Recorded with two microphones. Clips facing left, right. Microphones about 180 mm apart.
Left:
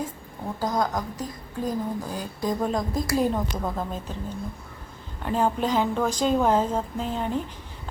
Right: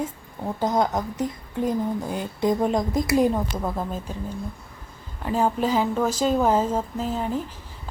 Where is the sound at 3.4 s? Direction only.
5° right (ahead or behind).